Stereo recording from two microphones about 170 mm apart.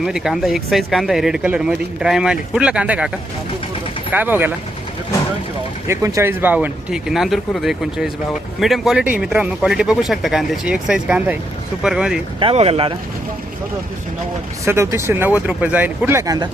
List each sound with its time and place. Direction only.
0.0 s speech: 5° right (ahead or behind)
4.1 s speech: 10° right (ahead or behind)
5.9 s speech: 20° right (ahead or behind)
12.4 s speech: 35° right (ahead or behind)
14.6 s speech: 15° right (ahead or behind)